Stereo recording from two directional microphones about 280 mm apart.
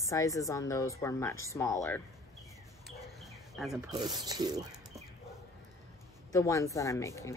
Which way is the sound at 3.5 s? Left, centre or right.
Centre.